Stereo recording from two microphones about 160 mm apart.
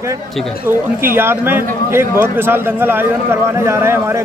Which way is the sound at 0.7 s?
15° right (ahead or behind).